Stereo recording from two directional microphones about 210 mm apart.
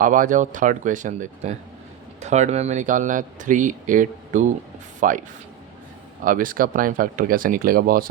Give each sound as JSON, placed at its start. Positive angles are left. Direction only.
{"t": 0.0, "sound": "speech", "side_deg": -40}
{"t": 6.2, "sound": "speech", "side_deg": -40}